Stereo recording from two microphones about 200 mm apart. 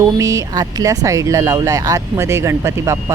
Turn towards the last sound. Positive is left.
turn(degrees=-15)  # may be behind; listen again after turning